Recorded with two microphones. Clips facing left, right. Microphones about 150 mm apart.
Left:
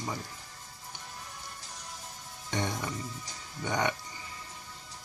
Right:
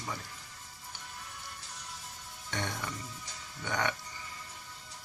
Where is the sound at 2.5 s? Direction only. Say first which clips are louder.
Left 4 dB; 20° left (ahead or behind).